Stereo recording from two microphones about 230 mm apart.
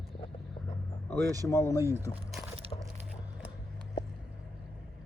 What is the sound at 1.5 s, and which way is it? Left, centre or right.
Speech, centre.